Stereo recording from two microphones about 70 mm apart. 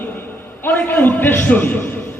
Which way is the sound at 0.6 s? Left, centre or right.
Left.